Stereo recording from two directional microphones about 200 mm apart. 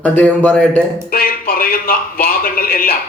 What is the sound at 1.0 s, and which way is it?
A man's voice, 50° left (ahead or behind).